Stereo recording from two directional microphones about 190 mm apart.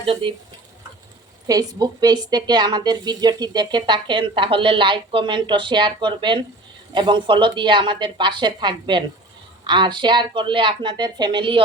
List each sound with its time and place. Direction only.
0.0 s a woman's voice: 30° right (ahead or behind)
1.5 s a woman's voice: 20° right (ahead or behind)